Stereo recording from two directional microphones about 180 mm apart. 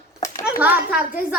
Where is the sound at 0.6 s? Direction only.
10° right (ahead or behind).